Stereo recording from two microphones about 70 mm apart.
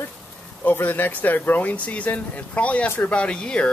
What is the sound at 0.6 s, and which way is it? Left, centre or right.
Speech, left.